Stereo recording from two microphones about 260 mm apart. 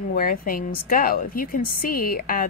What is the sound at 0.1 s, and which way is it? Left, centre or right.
A woman's voice, left.